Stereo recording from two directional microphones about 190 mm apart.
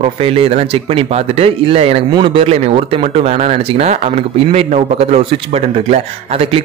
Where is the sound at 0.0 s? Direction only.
30° right (ahead or behind).